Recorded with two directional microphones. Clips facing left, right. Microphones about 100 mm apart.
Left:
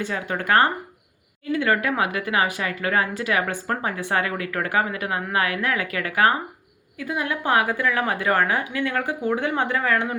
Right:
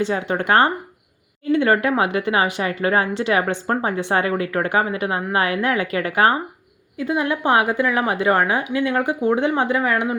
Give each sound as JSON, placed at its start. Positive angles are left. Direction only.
{"t": 0.0, "sound": "a woman's voice", "side_deg": -25}